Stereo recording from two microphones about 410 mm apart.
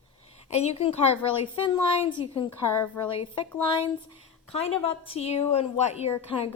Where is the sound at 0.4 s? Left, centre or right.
Centre.